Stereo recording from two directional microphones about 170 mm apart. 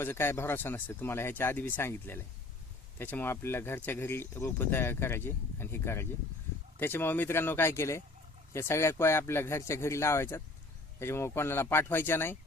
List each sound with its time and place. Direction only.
0.0 s speech: 15° left (ahead or behind)